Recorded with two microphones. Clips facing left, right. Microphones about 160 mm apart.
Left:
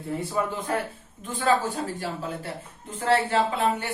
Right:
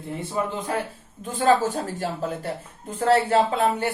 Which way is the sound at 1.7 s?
45° right (ahead or behind).